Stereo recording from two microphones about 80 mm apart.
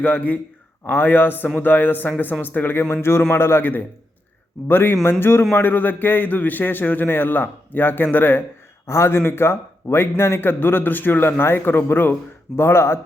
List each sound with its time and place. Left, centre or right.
0.0 s a man's voice: left